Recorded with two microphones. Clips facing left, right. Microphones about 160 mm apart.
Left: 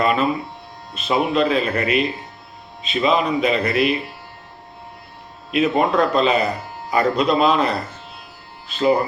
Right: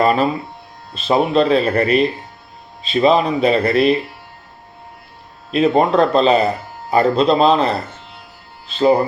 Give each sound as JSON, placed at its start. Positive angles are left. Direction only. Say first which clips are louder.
{"t": 0.0, "sound": "speech", "louder": "right 3 dB", "side_deg": -35}
{"t": 5.5, "sound": "a man's voice", "louder": "right 4 dB", "side_deg": -30}